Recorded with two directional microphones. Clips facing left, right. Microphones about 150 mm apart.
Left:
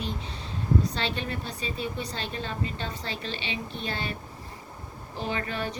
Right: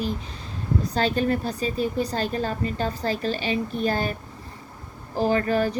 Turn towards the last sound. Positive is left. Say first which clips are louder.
# right 9 dB
turn(degrees=-40)  # may be behind; listen again after turning